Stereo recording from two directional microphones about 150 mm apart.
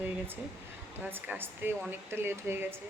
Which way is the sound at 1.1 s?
15° right (ahead or behind).